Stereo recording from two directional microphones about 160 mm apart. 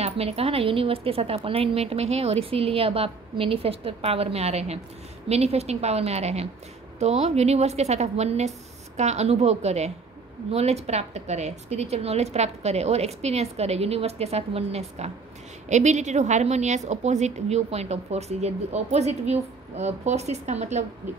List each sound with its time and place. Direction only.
0.0 s a woman's voice: 40° right (ahead or behind)